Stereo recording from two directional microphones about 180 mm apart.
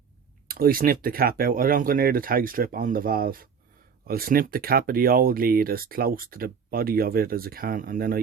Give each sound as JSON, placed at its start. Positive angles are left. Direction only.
{"t": 0.4, "sound": "speech", "side_deg": -55}